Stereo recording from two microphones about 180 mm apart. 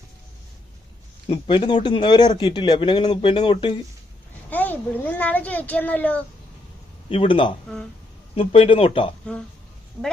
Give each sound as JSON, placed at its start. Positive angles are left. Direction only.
{"t": 1.3, "sound": "speech", "side_deg": 30}
{"t": 4.4, "sound": "a child's voice", "side_deg": 10}
{"t": 7.1, "sound": "speech", "side_deg": 30}